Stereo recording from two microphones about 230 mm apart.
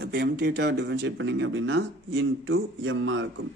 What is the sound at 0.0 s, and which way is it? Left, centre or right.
A man's voice, right.